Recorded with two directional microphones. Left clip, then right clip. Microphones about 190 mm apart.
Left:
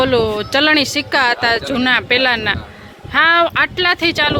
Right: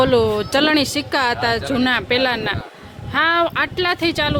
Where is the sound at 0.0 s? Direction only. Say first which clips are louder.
Left 1 dB; 20° right (ahead or behind).